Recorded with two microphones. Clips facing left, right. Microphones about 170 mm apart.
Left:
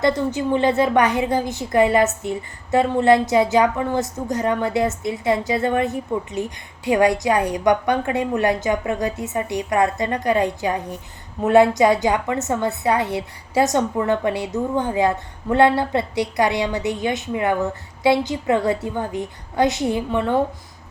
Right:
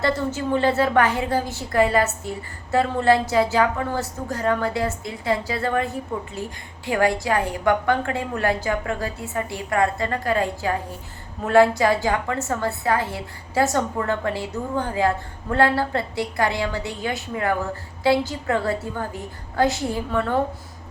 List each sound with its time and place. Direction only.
0.0 s a woman's voice: 15° left (ahead or behind)